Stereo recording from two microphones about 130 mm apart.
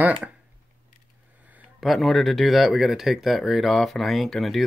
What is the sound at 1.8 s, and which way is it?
Speech, centre (ahead or behind).